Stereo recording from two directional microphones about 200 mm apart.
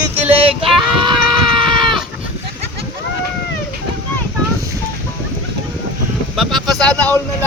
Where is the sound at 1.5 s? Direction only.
25° right (ahead or behind).